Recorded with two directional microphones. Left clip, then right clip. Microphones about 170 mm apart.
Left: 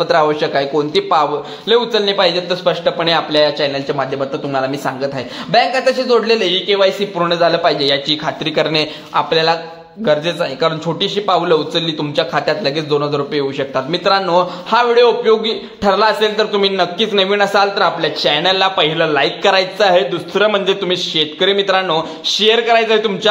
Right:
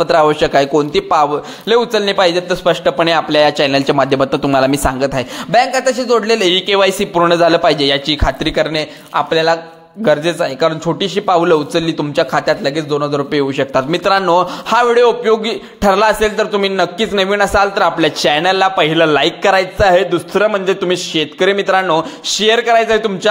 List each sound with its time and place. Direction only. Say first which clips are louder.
0.0 s a man's voice: right 2 dB; 35° right (ahead or behind)
6.5 s a man's voice: right 1 dB; 45° right (ahead or behind)
8.5 s a man's voice: even; 10° right (ahead or behind)
13.3 s a man's voice: right 3 dB; 35° right (ahead or behind)
17.8 s a man's voice: right 2 dB; 40° right (ahead or behind)
19.4 s a man's voice: even; 20° right (ahead or behind)